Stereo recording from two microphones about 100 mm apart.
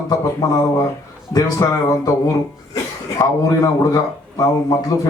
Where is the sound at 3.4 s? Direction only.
35° left (ahead or behind).